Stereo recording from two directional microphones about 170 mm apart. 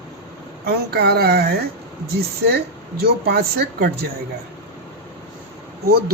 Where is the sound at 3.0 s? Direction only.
70° right (ahead or behind).